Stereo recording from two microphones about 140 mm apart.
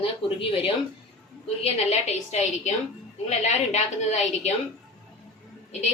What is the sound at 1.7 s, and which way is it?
A woman's voice, 50° left (ahead or behind).